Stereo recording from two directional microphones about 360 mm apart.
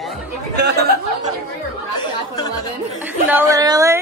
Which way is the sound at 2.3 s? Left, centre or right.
Centre.